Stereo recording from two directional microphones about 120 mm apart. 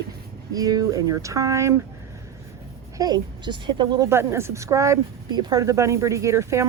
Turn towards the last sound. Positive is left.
turn(degrees=-25)  # may be behind; listen again after turning